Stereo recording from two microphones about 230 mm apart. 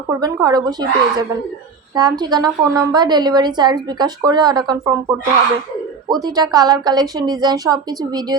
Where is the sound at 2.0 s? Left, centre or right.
Centre.